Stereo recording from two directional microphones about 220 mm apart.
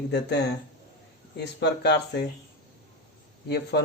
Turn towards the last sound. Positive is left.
turn(degrees=50)  # may be behind; listen again after turning